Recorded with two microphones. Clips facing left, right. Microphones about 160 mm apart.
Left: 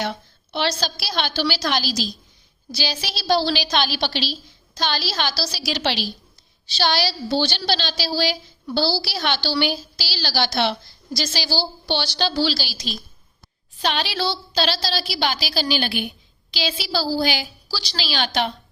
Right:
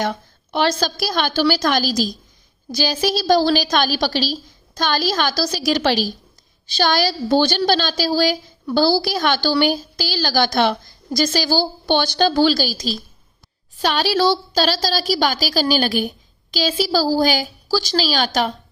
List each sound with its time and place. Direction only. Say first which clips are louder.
0.5 s a woman's voice: right 5 dB; 50° right (ahead or behind)